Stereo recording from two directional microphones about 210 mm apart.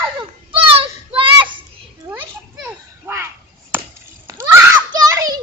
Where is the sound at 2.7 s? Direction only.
10° right (ahead or behind).